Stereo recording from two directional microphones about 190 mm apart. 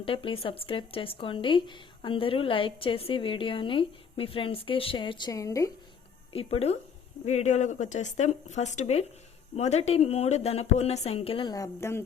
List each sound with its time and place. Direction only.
0.0 s speech: 30° left (ahead or behind)
6.3 s a woman's voice: 30° left (ahead or behind); by 12.0 s 15° left (ahead or behind)